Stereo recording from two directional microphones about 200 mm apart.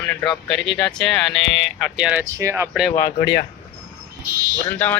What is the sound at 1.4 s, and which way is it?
Speech, 65° left (ahead or behind).